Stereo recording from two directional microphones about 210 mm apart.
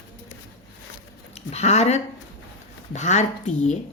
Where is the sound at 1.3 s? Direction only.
30° left (ahead or behind).